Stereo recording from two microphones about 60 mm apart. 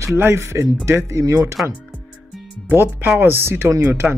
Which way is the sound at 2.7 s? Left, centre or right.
Right.